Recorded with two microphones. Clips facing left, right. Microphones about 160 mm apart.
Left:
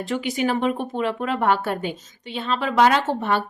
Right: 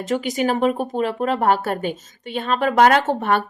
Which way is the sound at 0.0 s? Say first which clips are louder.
Right 2 dB; 45° right (ahead or behind).